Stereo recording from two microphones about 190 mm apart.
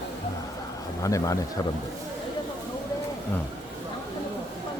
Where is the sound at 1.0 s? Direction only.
15° left (ahead or behind).